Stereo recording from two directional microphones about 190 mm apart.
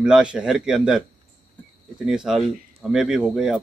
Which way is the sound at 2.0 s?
5° right (ahead or behind).